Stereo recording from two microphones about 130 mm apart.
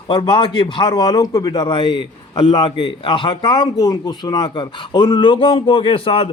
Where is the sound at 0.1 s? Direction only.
40° left (ahead or behind).